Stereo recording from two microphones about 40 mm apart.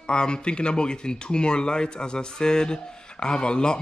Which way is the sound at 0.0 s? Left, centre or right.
Left.